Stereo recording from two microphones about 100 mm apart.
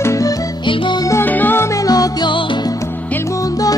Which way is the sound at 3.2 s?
35° left (ahead or behind).